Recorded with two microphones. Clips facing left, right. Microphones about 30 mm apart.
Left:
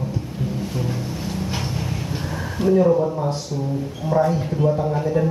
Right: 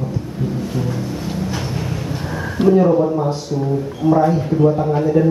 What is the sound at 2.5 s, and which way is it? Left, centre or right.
A man's voice, right.